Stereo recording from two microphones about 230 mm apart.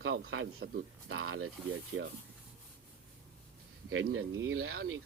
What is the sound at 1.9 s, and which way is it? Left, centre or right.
Speech, right.